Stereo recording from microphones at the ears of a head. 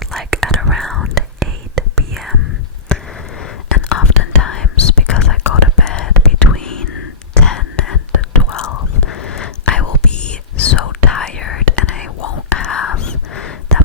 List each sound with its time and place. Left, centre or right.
0.0 s whispering: centre
3.3 s whispering: left